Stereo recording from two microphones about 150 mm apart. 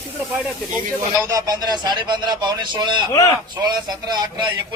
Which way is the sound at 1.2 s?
25° right (ahead or behind).